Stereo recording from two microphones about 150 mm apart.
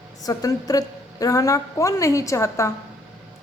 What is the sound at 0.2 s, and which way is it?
A woman's voice, 25° left (ahead or behind).